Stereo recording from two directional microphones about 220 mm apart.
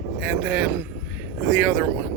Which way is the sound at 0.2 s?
5° right (ahead or behind).